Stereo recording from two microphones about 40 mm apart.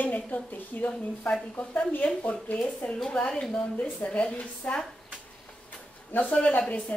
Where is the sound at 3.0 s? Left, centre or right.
Left.